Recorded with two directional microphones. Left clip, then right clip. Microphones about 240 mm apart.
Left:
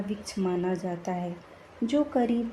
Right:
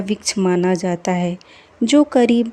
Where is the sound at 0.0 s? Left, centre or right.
Right.